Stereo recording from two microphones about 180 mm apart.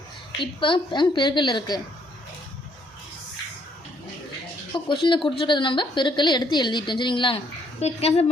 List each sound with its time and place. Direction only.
0.3 s a woman's voice: 25° left (ahead or behind)
4.7 s a woman's voice: 25° left (ahead or behind)